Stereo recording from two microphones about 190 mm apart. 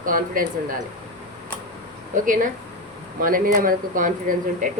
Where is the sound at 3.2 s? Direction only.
45° right (ahead or behind).